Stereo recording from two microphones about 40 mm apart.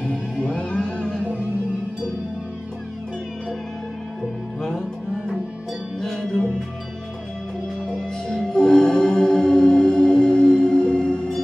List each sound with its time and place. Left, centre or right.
0.0 s music: left
4.6 s music: centre
8.3 s music: centre